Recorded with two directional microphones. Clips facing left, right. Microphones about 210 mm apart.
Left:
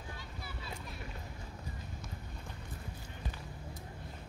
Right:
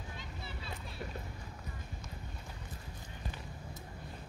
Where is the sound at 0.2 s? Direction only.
25° right (ahead or behind).